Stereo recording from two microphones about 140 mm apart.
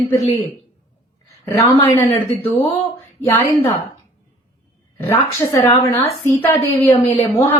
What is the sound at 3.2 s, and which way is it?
Speech, 20° left (ahead or behind).